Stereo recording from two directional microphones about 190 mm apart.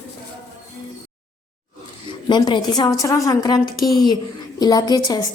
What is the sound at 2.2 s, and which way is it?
A woman's voice, 25° left (ahead or behind).